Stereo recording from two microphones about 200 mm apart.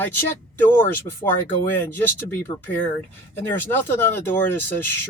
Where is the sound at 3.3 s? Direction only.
10° left (ahead or behind).